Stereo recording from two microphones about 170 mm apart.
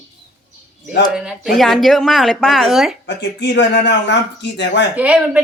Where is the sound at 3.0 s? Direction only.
90° left.